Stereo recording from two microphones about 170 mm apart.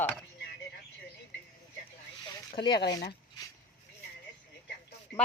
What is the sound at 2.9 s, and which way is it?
Speech, 25° left (ahead or behind).